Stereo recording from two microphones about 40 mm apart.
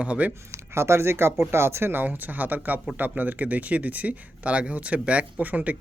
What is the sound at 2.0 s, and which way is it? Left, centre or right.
Speech, right.